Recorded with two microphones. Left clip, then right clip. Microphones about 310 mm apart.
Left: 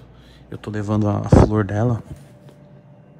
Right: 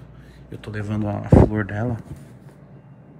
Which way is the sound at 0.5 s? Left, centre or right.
Centre.